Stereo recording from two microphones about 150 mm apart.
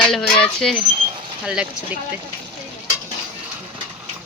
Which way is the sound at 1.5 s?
5° right (ahead or behind).